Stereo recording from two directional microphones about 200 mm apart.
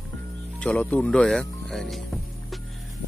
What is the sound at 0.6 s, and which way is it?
Speech, 5° left (ahead or behind).